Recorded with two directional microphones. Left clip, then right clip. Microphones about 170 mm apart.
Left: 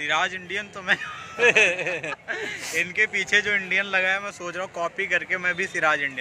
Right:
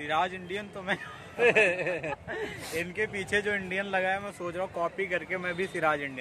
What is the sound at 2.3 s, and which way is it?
A man's voice, 25° right (ahead or behind).